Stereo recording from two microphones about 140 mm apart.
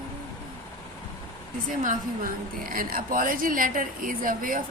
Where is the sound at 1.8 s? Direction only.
70° right (ahead or behind).